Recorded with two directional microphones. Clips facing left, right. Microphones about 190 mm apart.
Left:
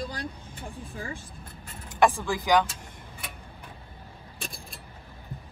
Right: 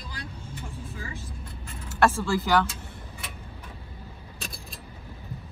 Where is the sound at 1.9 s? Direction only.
15° left (ahead or behind).